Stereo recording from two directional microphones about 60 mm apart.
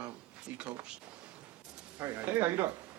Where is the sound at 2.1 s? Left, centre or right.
Right.